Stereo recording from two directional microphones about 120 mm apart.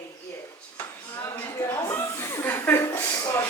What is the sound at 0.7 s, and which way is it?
Speech, 20° left (ahead or behind).